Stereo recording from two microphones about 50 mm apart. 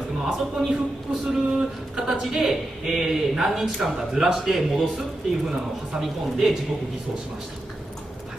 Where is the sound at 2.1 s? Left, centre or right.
Centre.